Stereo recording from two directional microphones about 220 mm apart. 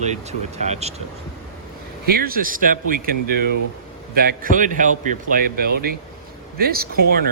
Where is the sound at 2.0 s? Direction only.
40° right (ahead or behind).